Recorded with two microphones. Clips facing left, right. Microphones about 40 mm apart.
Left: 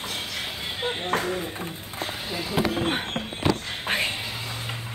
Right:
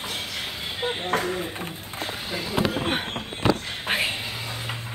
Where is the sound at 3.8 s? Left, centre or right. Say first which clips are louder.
Right 1 dB; centre.